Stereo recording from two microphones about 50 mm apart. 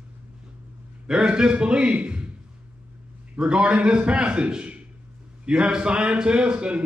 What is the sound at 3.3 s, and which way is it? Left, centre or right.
A man's voice, centre.